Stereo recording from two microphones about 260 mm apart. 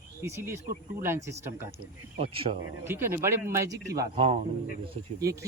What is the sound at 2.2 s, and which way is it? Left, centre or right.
Speech, right.